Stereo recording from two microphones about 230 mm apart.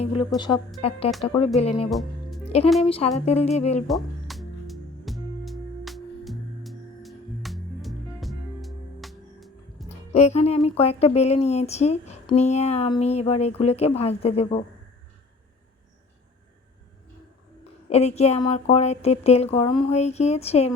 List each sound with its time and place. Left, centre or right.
0.0 s a woman's voice: left
1.9 s music: centre
2.4 s music: left
2.8 s a woman's voice: left
3.8 s music: centre
10.1 s a woman's voice: left
17.6 s a woman's voice: left